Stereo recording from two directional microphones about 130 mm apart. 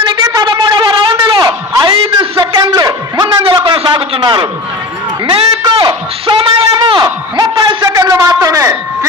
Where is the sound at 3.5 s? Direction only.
40° right (ahead or behind).